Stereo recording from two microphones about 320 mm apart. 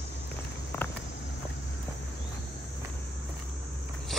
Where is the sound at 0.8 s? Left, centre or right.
Centre.